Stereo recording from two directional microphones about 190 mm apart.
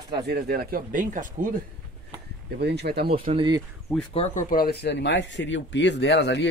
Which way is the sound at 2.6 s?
60° right (ahead or behind).